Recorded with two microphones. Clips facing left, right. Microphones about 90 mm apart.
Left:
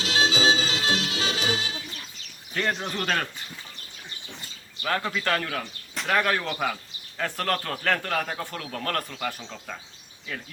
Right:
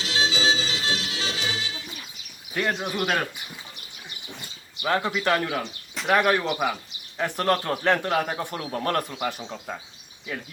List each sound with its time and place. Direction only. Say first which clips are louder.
0.0 s music: left 2 dB; 55° left (ahead or behind)
1.9 s bird: right 1 dB; 10° right (ahead or behind)
6.1 s a man's voice: right 4 dB; 20° right (ahead or behind)